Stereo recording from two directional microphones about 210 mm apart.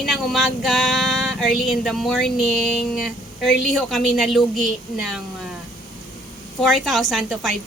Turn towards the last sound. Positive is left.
turn(degrees=0)  # may be behind; listen again after turning